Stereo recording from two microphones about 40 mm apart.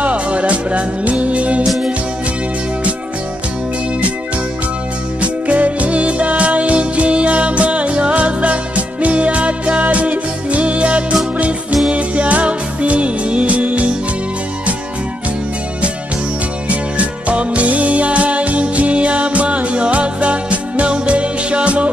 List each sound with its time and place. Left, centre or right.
0.0 s music: right
5.2 s music: right
16.6 s music: right